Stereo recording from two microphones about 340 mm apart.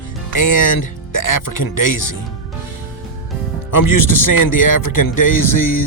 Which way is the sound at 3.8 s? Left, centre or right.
Left.